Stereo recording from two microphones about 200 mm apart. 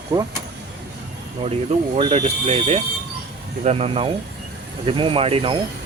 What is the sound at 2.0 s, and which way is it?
Speech, 30° right (ahead or behind).